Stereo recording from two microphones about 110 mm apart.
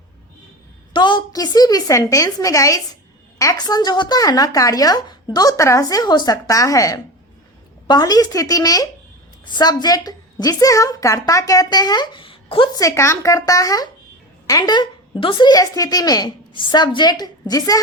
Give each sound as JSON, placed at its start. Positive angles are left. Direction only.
{"t": 0.9, "sound": "a woman's voice", "side_deg": 45}
{"t": 6.0, "sound": "a woman's voice", "side_deg": 40}
{"t": 12.8, "sound": "a woman's voice", "side_deg": 25}